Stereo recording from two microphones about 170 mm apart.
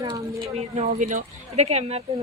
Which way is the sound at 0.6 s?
40° right (ahead or behind).